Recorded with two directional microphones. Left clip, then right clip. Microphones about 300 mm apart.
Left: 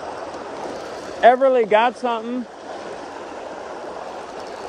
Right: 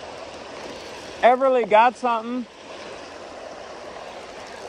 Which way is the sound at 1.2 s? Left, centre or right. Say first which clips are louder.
Left 3 dB; right.